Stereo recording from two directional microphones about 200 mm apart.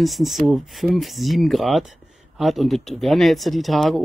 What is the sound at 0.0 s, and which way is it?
Speech, centre (ahead or behind).